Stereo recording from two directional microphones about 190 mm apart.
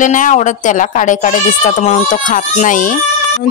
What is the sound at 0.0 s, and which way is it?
Speech, 40° left (ahead or behind).